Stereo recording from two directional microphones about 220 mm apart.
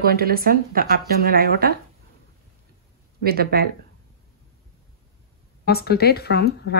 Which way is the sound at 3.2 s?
45° right (ahead or behind).